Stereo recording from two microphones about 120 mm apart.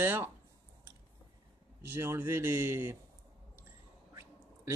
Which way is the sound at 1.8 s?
20° right (ahead or behind).